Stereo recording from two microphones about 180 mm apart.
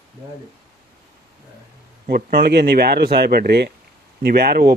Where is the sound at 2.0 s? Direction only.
55° right (ahead or behind).